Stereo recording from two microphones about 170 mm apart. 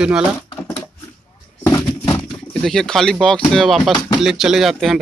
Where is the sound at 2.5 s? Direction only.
Centre (ahead or behind).